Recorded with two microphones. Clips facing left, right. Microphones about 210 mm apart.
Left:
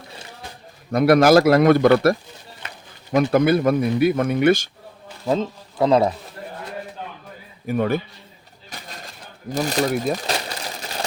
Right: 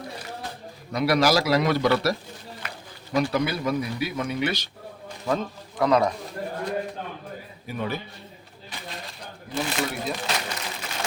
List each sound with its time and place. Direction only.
0.9 s speech: 50° left (ahead or behind)
3.3 s speech: 50° left (ahead or behind)
5.2 s speech: 25° left (ahead or behind)
7.7 s speech: 55° left (ahead or behind)
8.7 s a sound: 40° left (ahead or behind)
9.5 s crumpling: 40° left (ahead or behind)